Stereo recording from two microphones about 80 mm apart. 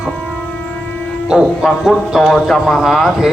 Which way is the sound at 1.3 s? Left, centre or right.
Centre.